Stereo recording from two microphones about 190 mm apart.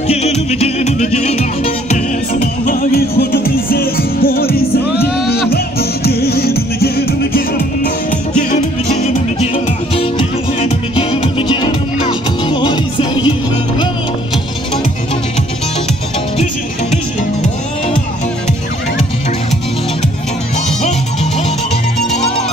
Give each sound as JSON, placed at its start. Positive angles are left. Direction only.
{"t": 0.1, "sound": "music", "side_deg": 35}
{"t": 2.4, "sound": "music", "side_deg": 45}
{"t": 8.4, "sound": "music", "side_deg": 40}